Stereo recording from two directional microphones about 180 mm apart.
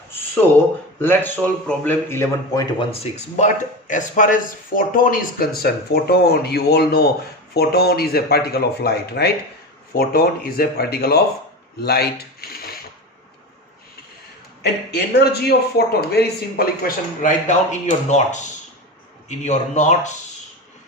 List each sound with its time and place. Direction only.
1.0 s a man's voice: 10° left (ahead or behind)
3.0 s speech: 40° left (ahead or behind); by 12.7 s 60° left (ahead or behind)
14.6 s speech: 65° left (ahead or behind); by 18.4 s 40° left (ahead or behind)
19.5 s speech: 40° left (ahead or behind)